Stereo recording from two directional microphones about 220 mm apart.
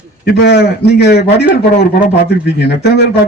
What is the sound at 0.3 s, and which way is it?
A man's voice, 50° left (ahead or behind).